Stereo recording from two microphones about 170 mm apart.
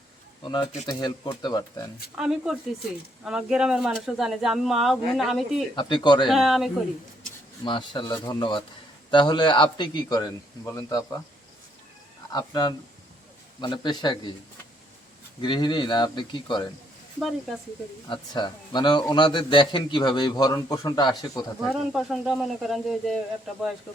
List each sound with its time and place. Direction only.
0.9 s a man's voice: 20° left (ahead or behind)
2.1 s speech: 5° right (ahead or behind)
5.7 s a man's voice: 25° left (ahead or behind)
6.2 s speech: centre (ahead or behind)
7.6 s a man's voice: 30° left (ahead or behind)
12.3 s a man's voice: 25° left (ahead or behind)
15.4 s a man's voice: 30° left (ahead or behind)
18.1 s a man's voice: 25° left (ahead or behind)
21.7 s speech: centre (ahead or behind)